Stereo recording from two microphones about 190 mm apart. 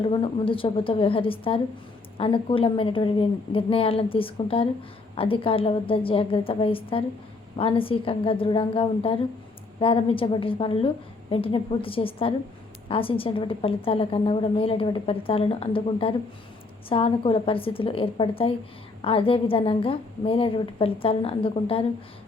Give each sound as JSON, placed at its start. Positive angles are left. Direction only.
{"t": 0.0, "sound": "a woman's voice", "side_deg": 25}